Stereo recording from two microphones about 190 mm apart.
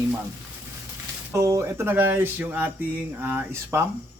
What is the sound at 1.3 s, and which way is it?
Speech, 15° right (ahead or behind).